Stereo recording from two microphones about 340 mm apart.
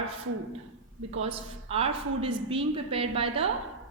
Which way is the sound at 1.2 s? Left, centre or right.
Centre.